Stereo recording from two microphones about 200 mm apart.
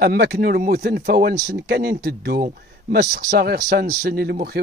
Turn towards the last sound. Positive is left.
turn(degrees=-50)  # may be behind; listen again after turning